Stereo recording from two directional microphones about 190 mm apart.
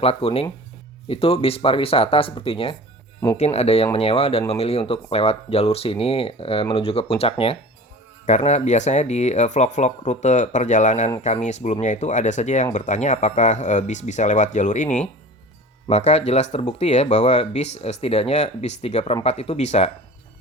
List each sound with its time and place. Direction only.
0.0 s speech: 30° left (ahead or behind)